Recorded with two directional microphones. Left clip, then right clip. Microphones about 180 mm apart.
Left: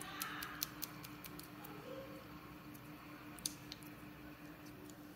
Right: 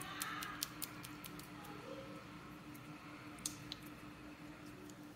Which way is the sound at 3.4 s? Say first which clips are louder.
Even; 5° left (ahead or behind).